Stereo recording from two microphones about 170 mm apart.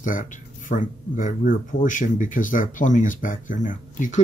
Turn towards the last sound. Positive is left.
turn(degrees=50)  # may be behind; listen again after turning